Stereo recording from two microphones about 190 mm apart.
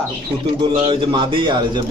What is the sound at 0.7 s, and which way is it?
Speech, 25° right (ahead or behind).